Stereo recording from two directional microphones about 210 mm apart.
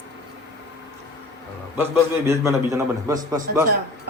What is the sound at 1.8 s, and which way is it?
A man's voice, 10° right (ahead or behind).